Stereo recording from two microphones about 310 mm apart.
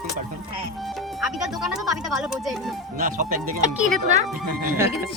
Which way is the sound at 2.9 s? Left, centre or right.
Right.